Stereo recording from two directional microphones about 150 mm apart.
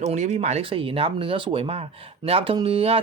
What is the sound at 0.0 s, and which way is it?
A man's voice, 50° right (ahead or behind).